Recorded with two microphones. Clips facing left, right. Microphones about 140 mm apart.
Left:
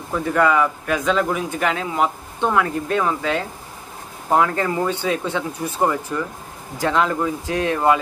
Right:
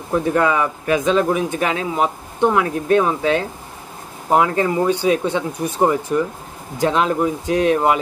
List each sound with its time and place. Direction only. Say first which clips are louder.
0.1 s a man's voice: right 1 dB; 15° right (ahead or behind)